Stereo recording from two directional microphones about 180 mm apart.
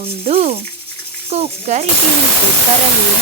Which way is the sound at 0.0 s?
35° right (ahead or behind).